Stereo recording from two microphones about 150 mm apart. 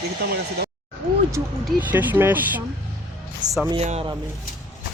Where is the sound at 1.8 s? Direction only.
10° right (ahead or behind).